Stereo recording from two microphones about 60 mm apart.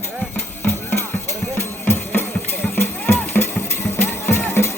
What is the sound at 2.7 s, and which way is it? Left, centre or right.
Music, left.